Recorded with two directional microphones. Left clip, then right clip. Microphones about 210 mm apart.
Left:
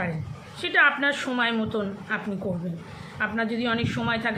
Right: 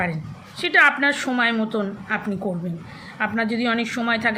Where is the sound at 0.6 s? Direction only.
15° right (ahead or behind).